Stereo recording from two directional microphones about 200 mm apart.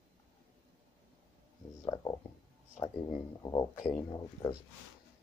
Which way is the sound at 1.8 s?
15° left (ahead or behind).